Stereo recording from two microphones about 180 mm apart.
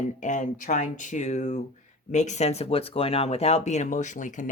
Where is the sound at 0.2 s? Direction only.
45° left (ahead or behind).